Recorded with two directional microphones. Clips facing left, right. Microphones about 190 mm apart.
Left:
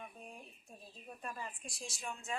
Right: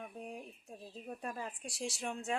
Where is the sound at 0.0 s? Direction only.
70° right (ahead or behind).